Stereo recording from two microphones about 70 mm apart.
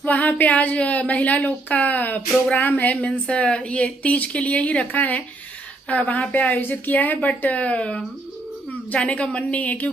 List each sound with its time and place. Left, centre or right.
0.0 s speech: left
3.1 s speech: centre